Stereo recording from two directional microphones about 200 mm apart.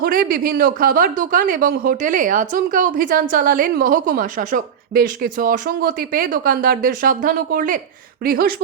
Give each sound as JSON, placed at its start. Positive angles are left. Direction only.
{"t": 0.0, "sound": "speech", "side_deg": -45}